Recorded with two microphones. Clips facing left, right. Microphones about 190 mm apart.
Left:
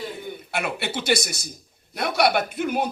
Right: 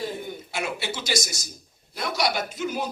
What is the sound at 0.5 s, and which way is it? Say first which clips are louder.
A man's voice: left 3 dB; 60° left (ahead or behind).